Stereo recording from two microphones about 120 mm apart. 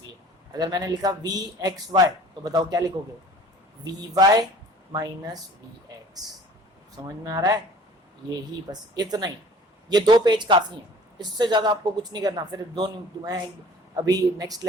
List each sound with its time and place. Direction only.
0.5 s speech: 35° right (ahead or behind)
6.9 s speech: 30° right (ahead or behind)
8.7 s speech: 35° right (ahead or behind)